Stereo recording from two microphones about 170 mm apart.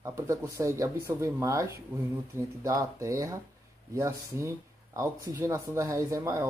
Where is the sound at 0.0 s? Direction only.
20° right (ahead or behind).